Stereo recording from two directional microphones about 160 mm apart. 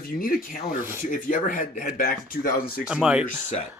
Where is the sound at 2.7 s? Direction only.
5° right (ahead or behind).